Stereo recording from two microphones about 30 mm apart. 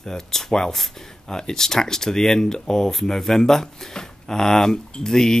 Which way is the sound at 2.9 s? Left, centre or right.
Centre.